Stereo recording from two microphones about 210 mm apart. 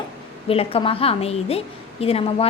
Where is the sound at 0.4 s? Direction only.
25° left (ahead or behind).